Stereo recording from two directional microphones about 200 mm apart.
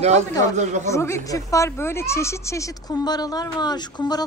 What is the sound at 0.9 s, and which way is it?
Speech, 15° left (ahead or behind).